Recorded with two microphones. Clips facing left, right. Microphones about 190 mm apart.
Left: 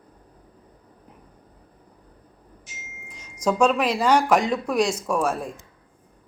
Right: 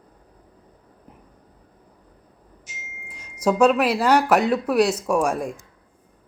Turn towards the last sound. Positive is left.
turn(degrees=-10)  # may be behind; listen again after turning